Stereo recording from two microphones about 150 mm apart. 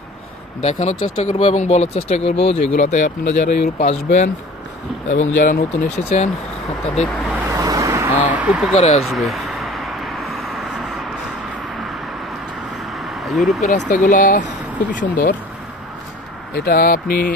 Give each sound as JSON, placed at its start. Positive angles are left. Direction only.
{"t": 0.6, "sound": "speech", "side_deg": 45}
{"t": 2.7, "sound": "speech", "side_deg": 55}
{"t": 7.5, "sound": "vehicle", "side_deg": -20}
{"t": 8.7, "sound": "speech", "side_deg": 45}
{"t": 9.1, "sound": "a sound", "side_deg": 0}
{"t": 12.9, "sound": "a sound", "side_deg": 0}
{"t": 13.6, "sound": "speech", "side_deg": 55}
{"t": 16.5, "sound": "speech", "side_deg": 85}